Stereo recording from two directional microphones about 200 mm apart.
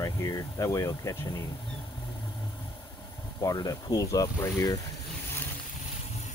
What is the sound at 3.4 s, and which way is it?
Speech, 20° left (ahead or behind).